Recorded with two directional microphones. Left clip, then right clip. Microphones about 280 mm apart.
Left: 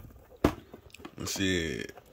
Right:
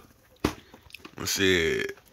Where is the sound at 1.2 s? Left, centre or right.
Centre.